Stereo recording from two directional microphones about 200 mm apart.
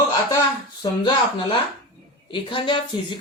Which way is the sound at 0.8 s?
20° left (ahead or behind).